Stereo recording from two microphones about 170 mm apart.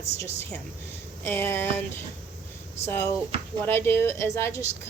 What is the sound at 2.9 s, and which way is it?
A woman's voice, 15° left (ahead or behind).